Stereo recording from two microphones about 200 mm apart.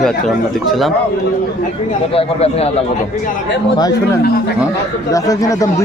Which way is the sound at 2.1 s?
30° left (ahead or behind).